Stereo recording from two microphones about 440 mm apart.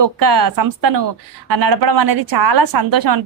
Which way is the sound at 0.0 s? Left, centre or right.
Right.